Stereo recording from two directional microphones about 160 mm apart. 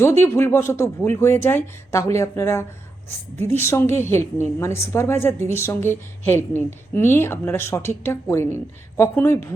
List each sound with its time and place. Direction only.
0.0 s a woman's voice: 15° left (ahead or behind)